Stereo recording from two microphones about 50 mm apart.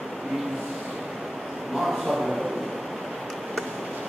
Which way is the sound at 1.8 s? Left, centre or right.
Centre.